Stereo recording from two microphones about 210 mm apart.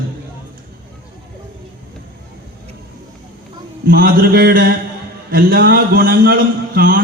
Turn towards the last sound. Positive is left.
turn(degrees=-45)  # may be behind; listen again after turning